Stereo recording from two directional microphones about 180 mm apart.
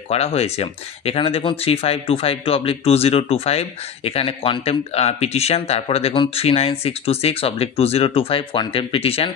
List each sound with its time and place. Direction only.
0.1 s speech: 35° left (ahead or behind)